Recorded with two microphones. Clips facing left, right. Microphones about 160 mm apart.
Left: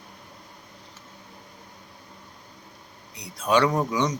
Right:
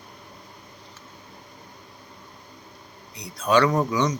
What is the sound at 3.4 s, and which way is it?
Speech, 10° left (ahead or behind).